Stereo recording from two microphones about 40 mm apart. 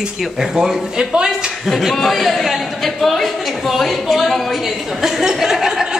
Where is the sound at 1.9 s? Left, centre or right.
Centre.